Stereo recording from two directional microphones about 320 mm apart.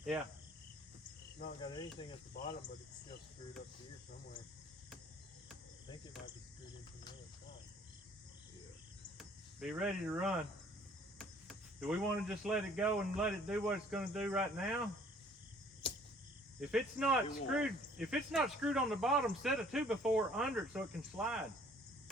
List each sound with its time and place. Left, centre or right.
1.4 s cricket: centre
9.1 s speech: centre
15.8 s cricket: centre
16.6 s speech: centre